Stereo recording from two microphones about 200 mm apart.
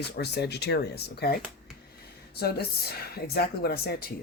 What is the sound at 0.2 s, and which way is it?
Speech, 55° left (ahead or behind).